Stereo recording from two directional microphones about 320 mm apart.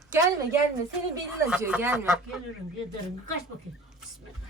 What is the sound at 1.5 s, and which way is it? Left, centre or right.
Speech, centre.